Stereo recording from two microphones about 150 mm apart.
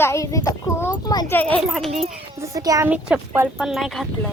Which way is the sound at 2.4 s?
25° right (ahead or behind).